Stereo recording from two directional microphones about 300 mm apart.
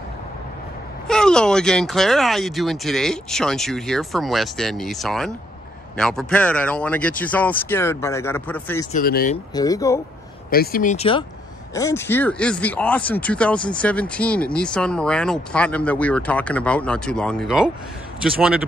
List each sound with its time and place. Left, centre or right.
1.0 s speech: centre
8.9 s speech: left
9.5 s speech: centre
10.5 s speech: left; by 18.6 s centre